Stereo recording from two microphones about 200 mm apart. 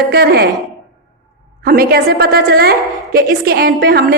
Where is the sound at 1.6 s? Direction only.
50° right (ahead or behind).